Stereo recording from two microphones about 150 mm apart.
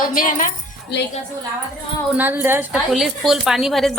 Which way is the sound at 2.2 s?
15° right (ahead or behind).